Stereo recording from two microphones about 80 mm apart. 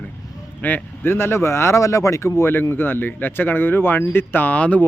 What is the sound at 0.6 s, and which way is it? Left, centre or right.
Speech, left.